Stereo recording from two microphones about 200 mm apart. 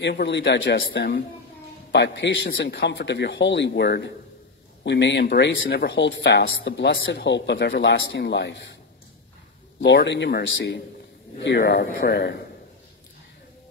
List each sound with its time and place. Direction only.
0.0 s speech: 60° left (ahead or behind)
9.8 s speech: 60° left (ahead or behind)